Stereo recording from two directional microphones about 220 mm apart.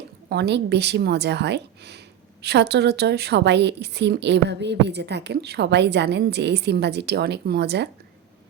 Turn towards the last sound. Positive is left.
turn(degrees=-50)  # may be behind; listen again after turning